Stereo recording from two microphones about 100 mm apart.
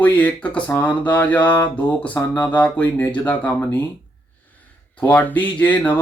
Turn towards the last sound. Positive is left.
turn(degrees=15)  # may be behind; listen again after turning